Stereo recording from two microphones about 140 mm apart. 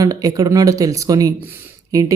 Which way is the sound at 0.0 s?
25° right (ahead or behind).